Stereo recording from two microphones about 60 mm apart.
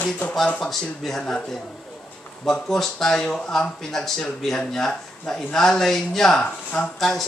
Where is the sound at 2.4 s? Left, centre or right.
Centre.